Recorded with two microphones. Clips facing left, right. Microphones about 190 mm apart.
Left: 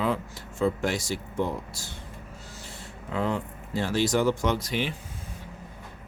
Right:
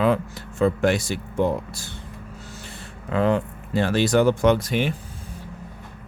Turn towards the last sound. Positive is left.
turn(degrees=-50)  # may be behind; listen again after turning